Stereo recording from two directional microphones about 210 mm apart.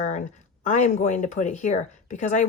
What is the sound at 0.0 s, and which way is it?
Speech, 35° left (ahead or behind).